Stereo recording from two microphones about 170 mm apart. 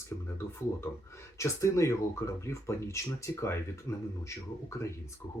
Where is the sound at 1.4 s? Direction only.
15° left (ahead or behind).